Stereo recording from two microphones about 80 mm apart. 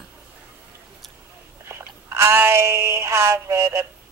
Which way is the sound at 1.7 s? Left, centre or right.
Right.